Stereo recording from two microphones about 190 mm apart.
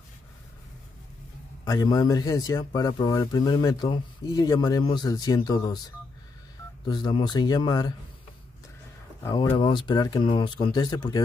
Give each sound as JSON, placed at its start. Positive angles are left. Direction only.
{"t": 1.6, "sound": "a man's voice", "side_deg": 20}
{"t": 6.9, "sound": "a man's voice", "side_deg": 25}
{"t": 9.2, "sound": "a man's voice", "side_deg": 20}